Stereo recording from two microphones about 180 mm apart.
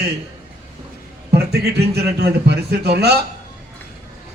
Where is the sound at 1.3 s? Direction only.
65° right (ahead or behind).